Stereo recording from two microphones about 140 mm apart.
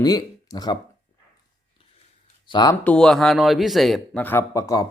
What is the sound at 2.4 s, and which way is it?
Speech, 30° left (ahead or behind).